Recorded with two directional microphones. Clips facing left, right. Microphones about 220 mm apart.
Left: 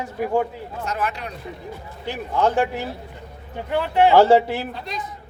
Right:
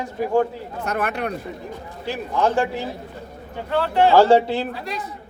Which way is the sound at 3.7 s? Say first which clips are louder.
Even; 15° left (ahead or behind).